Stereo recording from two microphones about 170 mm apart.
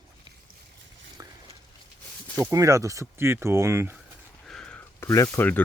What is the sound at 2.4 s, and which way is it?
Speech, 20° right (ahead or behind).